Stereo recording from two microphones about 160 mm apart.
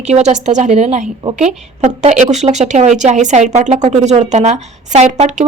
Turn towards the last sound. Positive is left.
turn(degrees=-50)  # may be behind; listen again after turning